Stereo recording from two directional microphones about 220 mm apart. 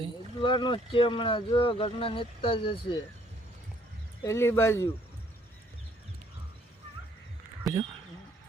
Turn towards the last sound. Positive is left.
turn(degrees=-15)  # may be behind; listen again after turning